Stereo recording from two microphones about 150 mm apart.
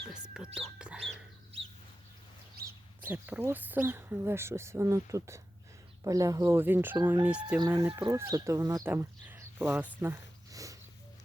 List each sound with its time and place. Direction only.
0.1 s music: 5° right (ahead or behind)
2.6 s bird: 90° right
3.1 s speech: 15° right (ahead or behind)
7.6 s speech: 25° right (ahead or behind)